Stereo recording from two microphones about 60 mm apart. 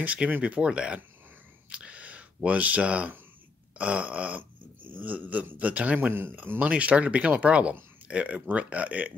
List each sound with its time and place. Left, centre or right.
0.0 s speech: right
1.7 s camera: centre
3.7 s a sound: right
5.9 s speech: right